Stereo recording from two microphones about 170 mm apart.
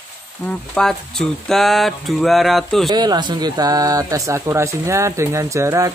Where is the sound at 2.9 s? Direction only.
25° right (ahead or behind).